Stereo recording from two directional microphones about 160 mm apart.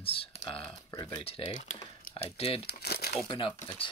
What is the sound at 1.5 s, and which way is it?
Speech, 50° left (ahead or behind).